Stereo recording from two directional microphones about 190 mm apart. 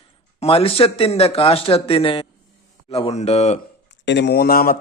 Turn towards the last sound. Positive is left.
turn(degrees=50)  # may be behind; listen again after turning